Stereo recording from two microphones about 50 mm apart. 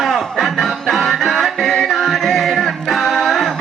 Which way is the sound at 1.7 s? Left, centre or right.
Centre.